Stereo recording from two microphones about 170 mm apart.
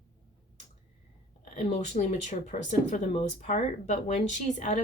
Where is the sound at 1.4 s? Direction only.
45° left (ahead or behind).